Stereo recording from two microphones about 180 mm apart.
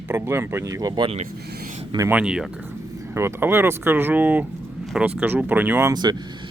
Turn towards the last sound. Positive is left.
turn(degrees=-20)  # may be behind; listen again after turning